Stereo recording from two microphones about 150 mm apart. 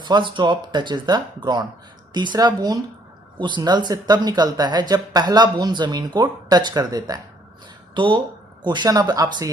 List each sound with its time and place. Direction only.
0.0 s speech: 30° right (ahead or behind)